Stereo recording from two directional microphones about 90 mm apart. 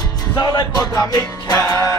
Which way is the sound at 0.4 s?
45° left (ahead or behind).